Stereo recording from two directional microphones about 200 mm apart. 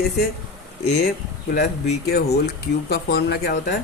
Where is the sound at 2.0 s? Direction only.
50° left (ahead or behind).